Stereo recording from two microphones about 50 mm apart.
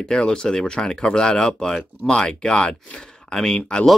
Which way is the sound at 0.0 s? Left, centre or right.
Centre.